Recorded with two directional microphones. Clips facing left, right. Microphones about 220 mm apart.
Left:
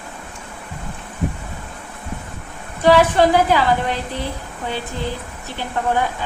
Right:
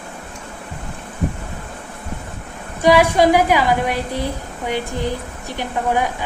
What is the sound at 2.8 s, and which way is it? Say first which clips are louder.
A woman's voice: even; 10° right (ahead or behind).